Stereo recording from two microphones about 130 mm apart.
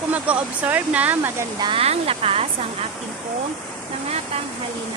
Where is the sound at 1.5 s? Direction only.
35° right (ahead or behind).